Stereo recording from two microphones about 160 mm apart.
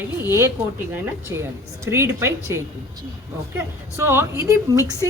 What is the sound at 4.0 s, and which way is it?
Speech, 15° right (ahead or behind).